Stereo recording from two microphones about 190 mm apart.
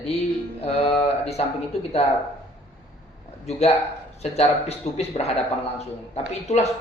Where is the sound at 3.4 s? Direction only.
35° left (ahead or behind).